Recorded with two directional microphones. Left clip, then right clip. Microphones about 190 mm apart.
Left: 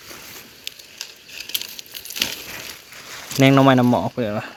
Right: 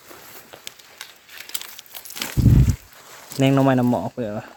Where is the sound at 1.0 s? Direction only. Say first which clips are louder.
Left 4 dB; 20° right (ahead or behind).